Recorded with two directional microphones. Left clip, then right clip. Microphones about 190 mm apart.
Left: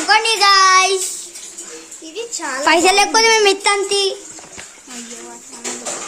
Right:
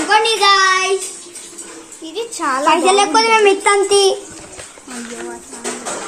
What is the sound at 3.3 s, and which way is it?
Speech, 60° left (ahead or behind).